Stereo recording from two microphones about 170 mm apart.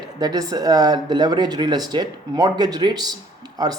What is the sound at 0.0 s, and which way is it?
Speech, 25° right (ahead or behind).